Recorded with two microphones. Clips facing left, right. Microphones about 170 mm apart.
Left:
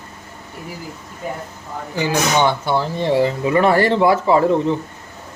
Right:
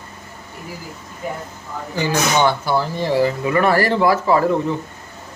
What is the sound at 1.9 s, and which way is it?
Speech, 15° left (ahead or behind).